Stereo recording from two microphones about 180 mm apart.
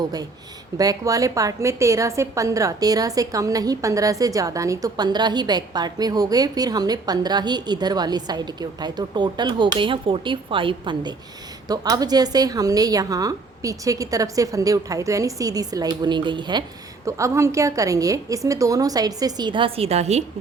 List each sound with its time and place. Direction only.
0.8 s a woman's voice: 20° right (ahead or behind); by 20.2 s 35° right (ahead or behind)